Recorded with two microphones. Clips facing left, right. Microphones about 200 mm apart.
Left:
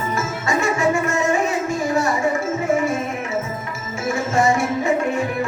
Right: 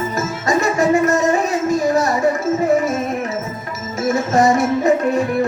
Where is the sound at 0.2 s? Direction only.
40° right (ahead or behind).